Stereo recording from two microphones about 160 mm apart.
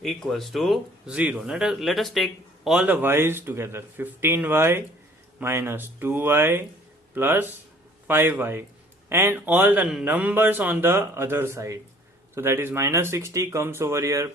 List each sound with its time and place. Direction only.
0.0 s speech: centre (ahead or behind); by 14.3 s 20° right (ahead or behind)